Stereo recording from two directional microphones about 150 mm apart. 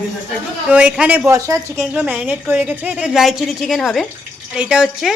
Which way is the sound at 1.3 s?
20° right (ahead or behind).